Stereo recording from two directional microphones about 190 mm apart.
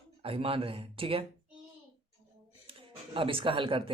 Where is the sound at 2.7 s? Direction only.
30° right (ahead or behind).